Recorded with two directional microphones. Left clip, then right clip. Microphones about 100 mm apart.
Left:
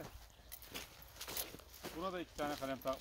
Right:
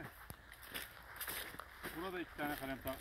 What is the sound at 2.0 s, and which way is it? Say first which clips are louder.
Speech: left 2 dB; 70° left (ahead or behind).